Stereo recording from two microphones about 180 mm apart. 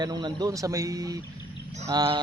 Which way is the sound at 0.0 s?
25° right (ahead or behind).